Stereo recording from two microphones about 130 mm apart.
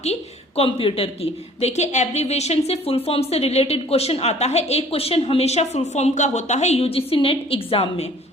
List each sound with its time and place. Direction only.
0.0 s a woman's voice: 50° left (ahead or behind)